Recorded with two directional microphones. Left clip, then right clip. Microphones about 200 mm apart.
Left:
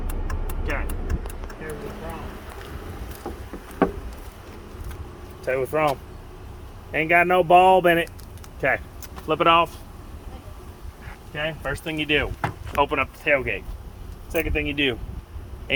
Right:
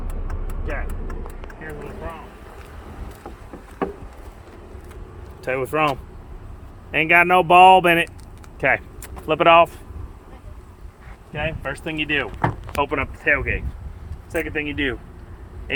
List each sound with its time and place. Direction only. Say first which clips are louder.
3.3 s rowboat: left 5 dB; 20° right (ahead or behind)
5.5 s speech: right 1 dB; 50° right (ahead or behind)
6.9 s speech: right 3 dB; 40° right (ahead or behind)
9.2 s speech: right 4 dB; 25° right (ahead or behind)
11.3 s speech: right 1 dB; 5° left (ahead or behind)
11.6 s speech: right 1 dB; 30° left (ahead or behind)
12.7 s speech: left 5 dB; 50° left (ahead or behind)
14.3 s speech: even; 30° left (ahead or behind)